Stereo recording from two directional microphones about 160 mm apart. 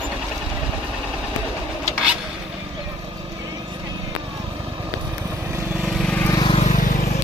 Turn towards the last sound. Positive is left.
turn(degrees=55)  # may be behind; listen again after turning